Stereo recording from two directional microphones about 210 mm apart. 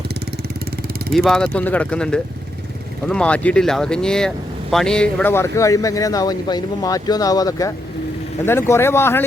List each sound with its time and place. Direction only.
1.1 s speech: centre (ahead or behind)